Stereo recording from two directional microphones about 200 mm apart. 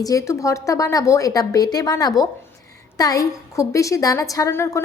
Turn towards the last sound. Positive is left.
turn(degrees=15)  # may be behind; listen again after turning